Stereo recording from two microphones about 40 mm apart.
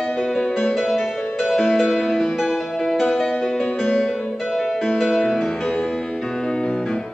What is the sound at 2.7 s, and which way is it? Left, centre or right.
Music, centre.